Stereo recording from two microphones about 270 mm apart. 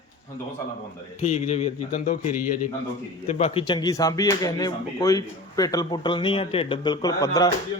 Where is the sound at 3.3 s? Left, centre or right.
Left.